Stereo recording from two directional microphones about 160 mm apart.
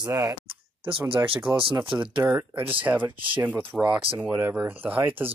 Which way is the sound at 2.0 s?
10° right (ahead or behind).